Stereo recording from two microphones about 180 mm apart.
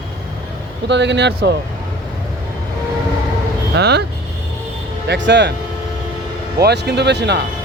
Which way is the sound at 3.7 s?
65° right (ahead or behind).